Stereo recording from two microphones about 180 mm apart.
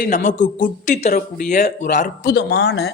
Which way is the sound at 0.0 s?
45° left (ahead or behind).